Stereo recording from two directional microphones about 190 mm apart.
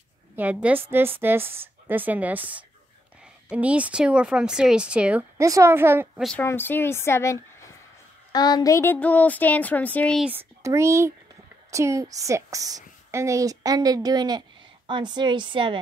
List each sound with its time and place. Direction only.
0.4 s a woman's voice: 10° right (ahead or behind)
6.2 s speech: 10° left (ahead or behind)
10.3 s a woman's voice: 15° right (ahead or behind)